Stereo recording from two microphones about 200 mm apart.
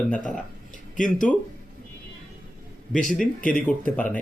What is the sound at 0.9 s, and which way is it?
Speech, 40° left (ahead or behind).